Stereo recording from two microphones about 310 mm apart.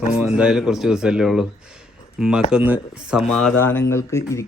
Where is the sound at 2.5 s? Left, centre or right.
Centre.